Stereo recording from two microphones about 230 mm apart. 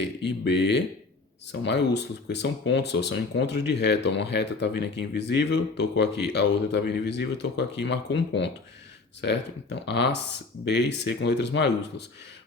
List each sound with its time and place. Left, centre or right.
0.0 s speech: left